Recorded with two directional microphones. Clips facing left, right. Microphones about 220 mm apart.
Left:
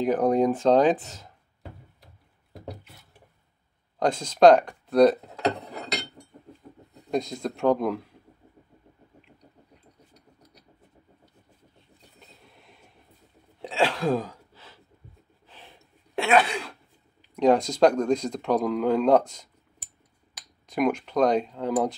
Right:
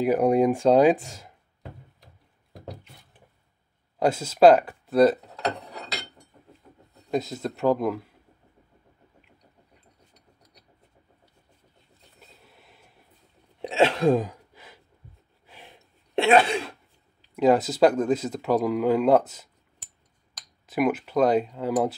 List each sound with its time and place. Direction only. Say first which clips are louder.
0.0 s speech: right 2 dB; 10° right (ahead or behind)
4.0 s speech: right 1 dB; 5° right (ahead or behind)
7.1 s speech: even; 5° right (ahead or behind)
12.4 s train: left 1 dB; 5° right (ahead or behind)
13.6 s sneeze: right 4 dB; 20° right (ahead or behind)
15.4 s a sound: right 2 dB; 10° right (ahead or behind)
16.2 s throat clearing: right 3 dB; 25° right (ahead or behind)
17.4 s speech: even; 5° right (ahead or behind)
20.6 s speech: right 1 dB; 5° right (ahead or behind)